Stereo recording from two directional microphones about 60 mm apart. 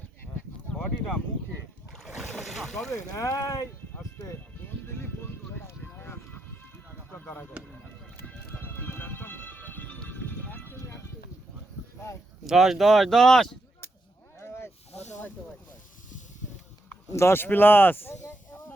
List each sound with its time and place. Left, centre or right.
0.7 s a sound: centre
2.0 s boat: centre
3.2 s speech: left
4.3 s music: left
7.1 s a sound: left
8.2 s music: left
8.6 s music: left
12.5 s speech: centre
14.3 s snake: left
17.1 s speech: left